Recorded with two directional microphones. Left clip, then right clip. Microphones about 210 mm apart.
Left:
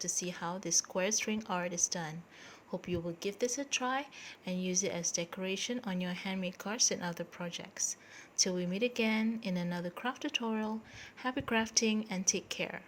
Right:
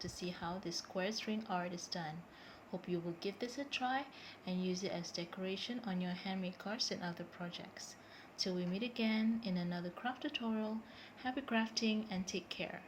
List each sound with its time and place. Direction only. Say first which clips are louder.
0.0 s speech: left 7 dB; 55° left (ahead or behind)